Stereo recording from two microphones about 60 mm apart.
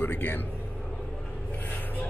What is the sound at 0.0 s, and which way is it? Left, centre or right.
Speech, left.